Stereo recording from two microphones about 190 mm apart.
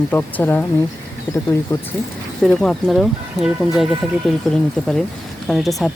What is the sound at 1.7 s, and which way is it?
Speech, 20° left (ahead or behind).